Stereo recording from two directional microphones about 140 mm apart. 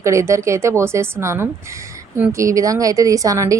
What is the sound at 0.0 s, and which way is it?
A woman's voice, 20° right (ahead or behind).